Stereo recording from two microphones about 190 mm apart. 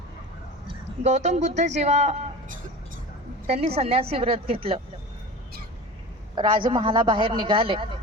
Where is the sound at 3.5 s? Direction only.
30° right (ahead or behind).